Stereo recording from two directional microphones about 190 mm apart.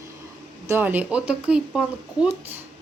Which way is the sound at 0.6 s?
10° right (ahead or behind).